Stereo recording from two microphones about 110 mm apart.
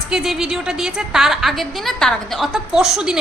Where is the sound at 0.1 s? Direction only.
5° right (ahead or behind).